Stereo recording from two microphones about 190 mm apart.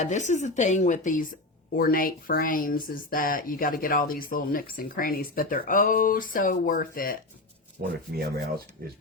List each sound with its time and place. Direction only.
0.0 s a woman's voice: 40° left (ahead or behind)
7.8 s speech: 55° right (ahead or behind)